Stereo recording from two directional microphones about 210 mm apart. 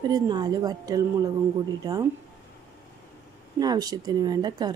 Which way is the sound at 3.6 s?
20° right (ahead or behind).